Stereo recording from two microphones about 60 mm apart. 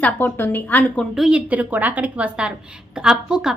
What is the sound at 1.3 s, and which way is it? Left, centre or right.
A woman's voice, right.